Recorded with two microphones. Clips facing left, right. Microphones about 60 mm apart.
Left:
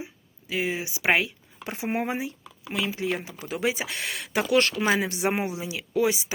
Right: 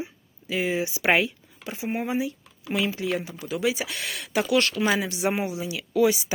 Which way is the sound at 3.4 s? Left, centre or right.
Left.